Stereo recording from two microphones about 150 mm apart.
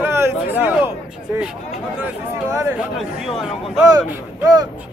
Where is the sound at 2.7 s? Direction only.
Centre (ahead or behind).